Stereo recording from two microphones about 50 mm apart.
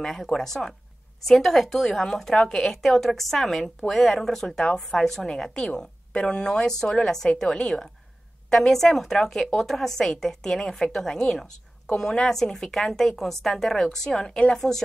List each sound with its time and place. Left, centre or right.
0.0 s a woman's voice: centre